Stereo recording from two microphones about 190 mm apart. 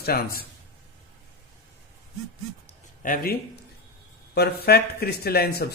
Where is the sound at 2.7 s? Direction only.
45° left (ahead or behind).